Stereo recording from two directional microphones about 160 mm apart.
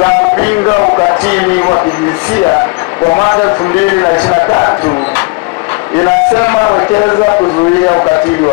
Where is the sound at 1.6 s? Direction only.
25° left (ahead or behind).